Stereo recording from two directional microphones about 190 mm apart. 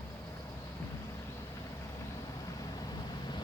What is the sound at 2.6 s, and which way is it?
Vehicle, 20° left (ahead or behind).